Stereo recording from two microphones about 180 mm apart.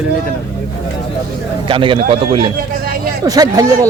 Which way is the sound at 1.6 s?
30° right (ahead or behind).